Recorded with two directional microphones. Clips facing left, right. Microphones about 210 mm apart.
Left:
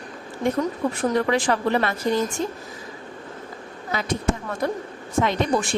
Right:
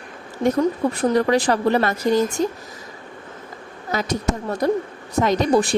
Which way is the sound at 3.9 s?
40° right (ahead or behind).